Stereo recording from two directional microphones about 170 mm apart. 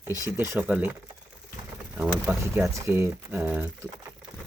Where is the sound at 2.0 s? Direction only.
15° right (ahead or behind).